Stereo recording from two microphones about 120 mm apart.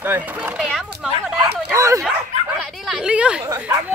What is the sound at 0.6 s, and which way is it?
Speech, centre (ahead or behind).